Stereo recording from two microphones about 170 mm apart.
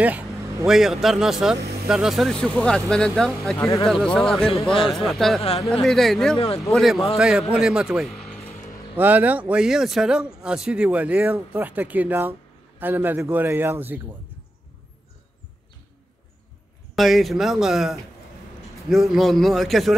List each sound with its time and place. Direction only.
0.0 s speech: 10° right (ahead or behind)
3.5 s speech: 15° left (ahead or behind)
3.8 s speech: 5° left (ahead or behind)
8.9 s speech: 10° right (ahead or behind)
16.9 s speech: centre (ahead or behind)